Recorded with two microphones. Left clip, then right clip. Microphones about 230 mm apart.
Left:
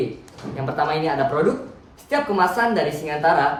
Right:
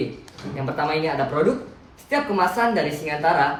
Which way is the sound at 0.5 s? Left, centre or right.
Centre.